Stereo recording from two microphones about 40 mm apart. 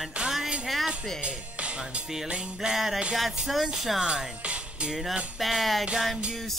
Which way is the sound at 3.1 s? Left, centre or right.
Centre.